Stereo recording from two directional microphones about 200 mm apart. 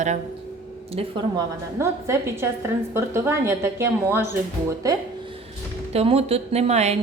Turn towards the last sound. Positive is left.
turn(degrees=-35)  # may be behind; listen again after turning